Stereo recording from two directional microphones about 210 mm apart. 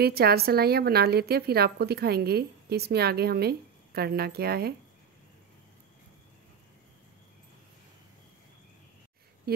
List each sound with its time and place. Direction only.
0.0 s a woman's voice: 50° right (ahead or behind)